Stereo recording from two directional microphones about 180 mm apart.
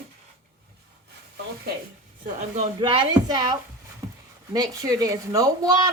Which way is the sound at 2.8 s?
25° right (ahead or behind).